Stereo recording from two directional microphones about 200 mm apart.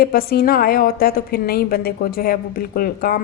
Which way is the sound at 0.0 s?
50° left (ahead or behind).